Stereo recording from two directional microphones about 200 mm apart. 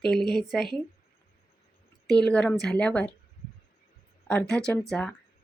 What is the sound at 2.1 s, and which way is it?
Speech, 5° left (ahead or behind).